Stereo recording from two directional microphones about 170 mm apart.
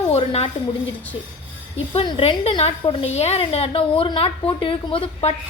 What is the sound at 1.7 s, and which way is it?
A woman's voice, 35° left (ahead or behind).